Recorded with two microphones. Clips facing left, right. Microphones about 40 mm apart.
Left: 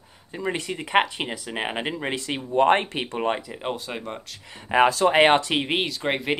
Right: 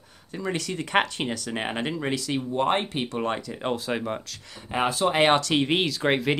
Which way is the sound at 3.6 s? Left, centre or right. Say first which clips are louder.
Right 3 dB; centre.